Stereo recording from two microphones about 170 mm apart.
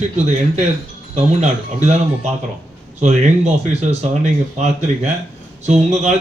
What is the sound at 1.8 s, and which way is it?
A man's voice, 40° right (ahead or behind).